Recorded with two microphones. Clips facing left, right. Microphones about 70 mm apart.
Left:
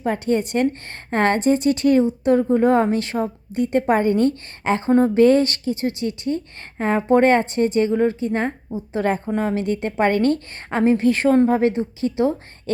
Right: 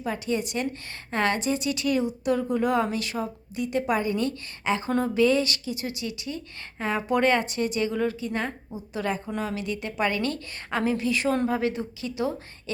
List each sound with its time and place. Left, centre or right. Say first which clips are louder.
0.0 s a woman's voice: left 7 dB; left
11.0 s a woman's voice: left 9 dB; left